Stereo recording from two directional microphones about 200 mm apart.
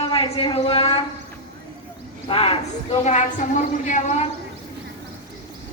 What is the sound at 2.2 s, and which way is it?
A woman's voice, 30° left (ahead or behind).